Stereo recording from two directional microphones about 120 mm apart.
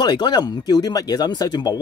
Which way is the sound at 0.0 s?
35° left (ahead or behind).